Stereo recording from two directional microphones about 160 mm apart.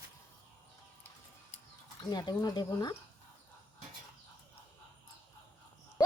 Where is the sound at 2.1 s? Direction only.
25° left (ahead or behind).